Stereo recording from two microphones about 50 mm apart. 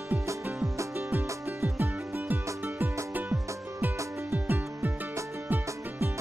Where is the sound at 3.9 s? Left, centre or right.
Right.